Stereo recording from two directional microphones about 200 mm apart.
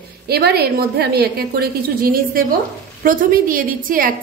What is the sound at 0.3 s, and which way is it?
A woman's voice, 50° right (ahead or behind).